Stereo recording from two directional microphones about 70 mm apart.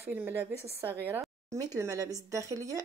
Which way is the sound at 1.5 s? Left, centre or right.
Right.